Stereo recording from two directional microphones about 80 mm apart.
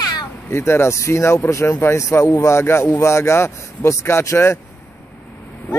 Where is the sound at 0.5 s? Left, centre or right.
Left.